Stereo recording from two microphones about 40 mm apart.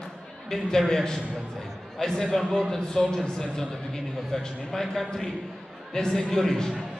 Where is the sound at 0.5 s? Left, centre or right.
Centre.